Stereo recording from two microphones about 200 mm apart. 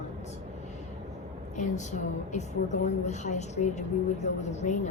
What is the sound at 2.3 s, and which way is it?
A woman's voice, 35° left (ahead or behind).